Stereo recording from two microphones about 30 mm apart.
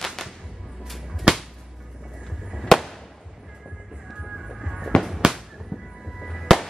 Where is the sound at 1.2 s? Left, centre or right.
Centre.